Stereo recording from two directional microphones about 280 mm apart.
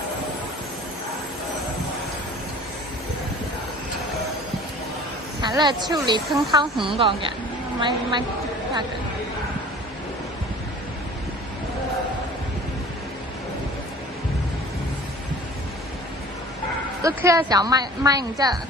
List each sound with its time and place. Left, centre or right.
5.4 s speech: centre
17.0 s speech: centre